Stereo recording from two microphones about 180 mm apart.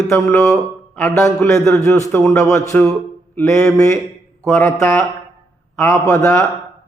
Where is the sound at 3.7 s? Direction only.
15° left (ahead or behind).